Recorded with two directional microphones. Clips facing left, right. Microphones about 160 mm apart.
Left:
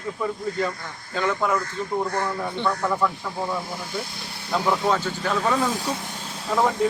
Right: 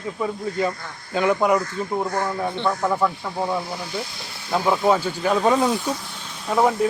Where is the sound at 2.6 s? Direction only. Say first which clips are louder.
Right 2 dB; 20° right (ahead or behind).